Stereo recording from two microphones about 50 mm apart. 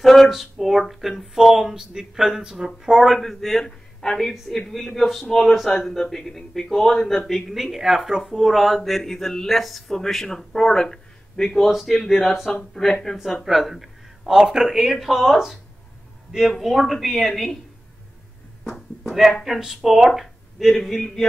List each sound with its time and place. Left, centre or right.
0.0 s a man's voice: centre
13.2 s a man's voice: centre
19.0 s a man's voice: centre
20.2 s a sound: centre
20.8 s a man's voice: centre